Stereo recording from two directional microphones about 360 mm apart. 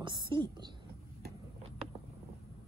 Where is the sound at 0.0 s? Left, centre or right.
Centre.